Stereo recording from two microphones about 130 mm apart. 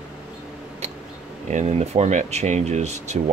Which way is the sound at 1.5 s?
60° right (ahead or behind).